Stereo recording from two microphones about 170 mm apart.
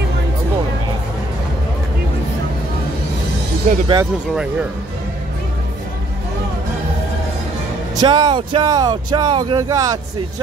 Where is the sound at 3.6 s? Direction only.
50° right (ahead or behind).